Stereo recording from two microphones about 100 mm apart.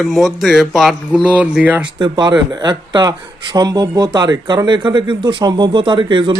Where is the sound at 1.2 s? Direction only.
15° right (ahead or behind).